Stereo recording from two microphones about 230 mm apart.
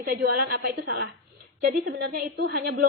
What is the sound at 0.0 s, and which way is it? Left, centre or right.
Female singing, right.